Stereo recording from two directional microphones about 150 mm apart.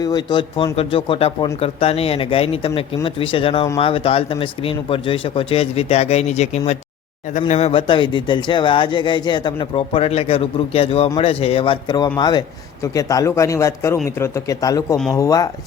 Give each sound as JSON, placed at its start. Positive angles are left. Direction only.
{"t": 0.0, "sound": "speech", "side_deg": 25}
{"t": 7.7, "sound": "a man's voice", "side_deg": 35}